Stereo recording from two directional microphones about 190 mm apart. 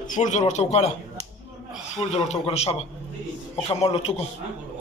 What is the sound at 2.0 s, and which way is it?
A man's voice, 35° left (ahead or behind).